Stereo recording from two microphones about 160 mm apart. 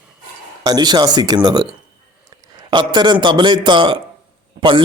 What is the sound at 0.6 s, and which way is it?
A man's voice, 25° right (ahead or behind).